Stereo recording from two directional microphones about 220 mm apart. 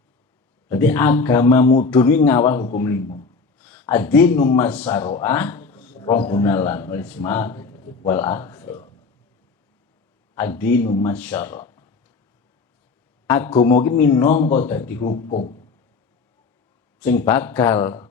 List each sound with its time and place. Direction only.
0.7 s speech: 10° left (ahead or behind)
1.6 s a man's voice: 30° left (ahead or behind)
1.9 s a man's voice: 10° left (ahead or behind)
10.3 s speech: 10° left (ahead or behind)
13.5 s speech: 15° left (ahead or behind)
17.0 s speech: 10° left (ahead or behind)